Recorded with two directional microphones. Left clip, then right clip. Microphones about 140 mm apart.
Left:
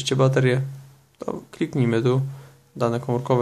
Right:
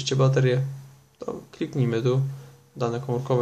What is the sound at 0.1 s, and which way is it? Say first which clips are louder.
Speech: left 3 dB; 45° left (ahead or behind).